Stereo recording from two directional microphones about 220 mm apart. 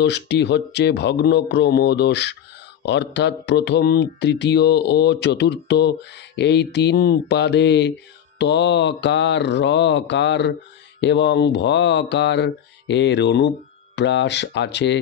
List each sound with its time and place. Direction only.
0.0 s speech: 50° left (ahead or behind)